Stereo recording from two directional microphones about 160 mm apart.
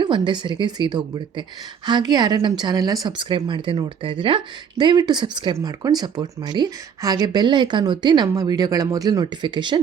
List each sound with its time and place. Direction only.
0.0 s speech: 30° right (ahead or behind)